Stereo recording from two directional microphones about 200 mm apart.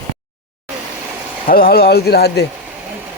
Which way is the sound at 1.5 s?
50° left (ahead or behind).